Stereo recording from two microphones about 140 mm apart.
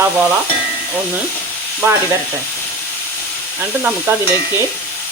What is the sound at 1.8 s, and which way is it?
Frying, 20° right (ahead or behind).